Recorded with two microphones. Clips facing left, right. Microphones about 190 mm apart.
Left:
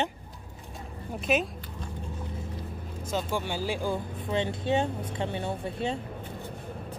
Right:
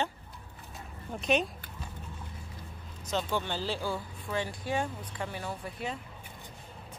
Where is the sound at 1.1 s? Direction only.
5° left (ahead or behind).